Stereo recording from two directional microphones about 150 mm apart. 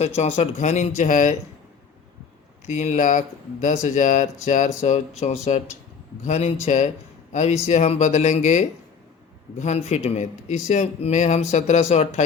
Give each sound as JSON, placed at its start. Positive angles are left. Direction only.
{"t": 0.0, "sound": "speech", "side_deg": 50}
{"t": 2.6, "sound": "speech", "side_deg": 50}